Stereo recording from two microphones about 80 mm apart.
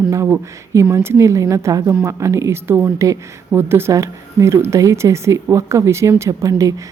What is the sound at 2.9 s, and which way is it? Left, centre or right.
Speech, right.